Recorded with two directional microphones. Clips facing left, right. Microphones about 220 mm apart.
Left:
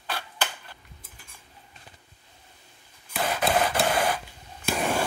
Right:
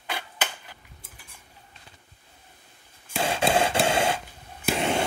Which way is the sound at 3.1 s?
25° right (ahead or behind).